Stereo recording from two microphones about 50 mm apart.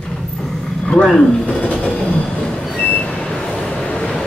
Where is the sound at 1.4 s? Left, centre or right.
Left.